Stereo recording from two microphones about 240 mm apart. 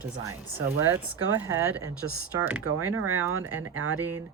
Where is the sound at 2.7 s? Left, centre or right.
Right.